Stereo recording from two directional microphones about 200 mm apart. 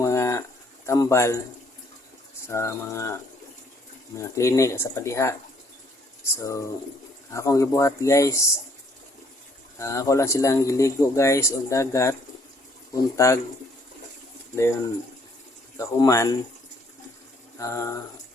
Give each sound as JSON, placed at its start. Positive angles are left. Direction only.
{"t": 0.0, "sound": "a sound", "side_deg": 15}
{"t": 0.9, "sound": "speech", "side_deg": 15}
{"t": 2.5, "sound": "speech", "side_deg": 15}
{"t": 4.2, "sound": "speech", "side_deg": 15}
{"t": 6.4, "sound": "speech", "side_deg": 15}
{"t": 9.7, "sound": "speech", "side_deg": 15}
{"t": 14.5, "sound": "speech", "side_deg": 15}
{"t": 15.8, "sound": "speech", "side_deg": 15}
{"t": 17.6, "sound": "speech", "side_deg": 15}